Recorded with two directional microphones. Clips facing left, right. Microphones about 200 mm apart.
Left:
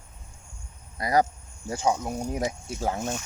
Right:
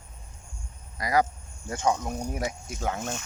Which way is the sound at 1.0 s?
25° left (ahead or behind).